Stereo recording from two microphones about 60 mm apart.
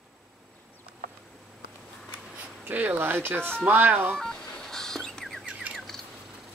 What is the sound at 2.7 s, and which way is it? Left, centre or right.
Speech, right.